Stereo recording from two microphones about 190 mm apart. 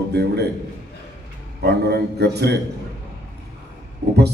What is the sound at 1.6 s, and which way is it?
Speech, 60° right (ahead or behind).